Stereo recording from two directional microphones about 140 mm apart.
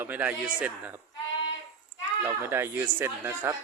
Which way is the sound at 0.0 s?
10° right (ahead or behind).